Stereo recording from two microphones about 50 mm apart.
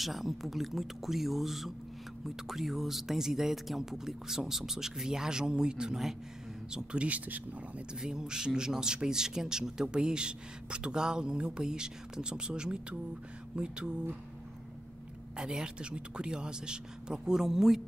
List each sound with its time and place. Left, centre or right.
0.0 s a man's voice: centre; by 7.8 s right
7.9 s a man's voice: centre
15.3 s a man's voice: centre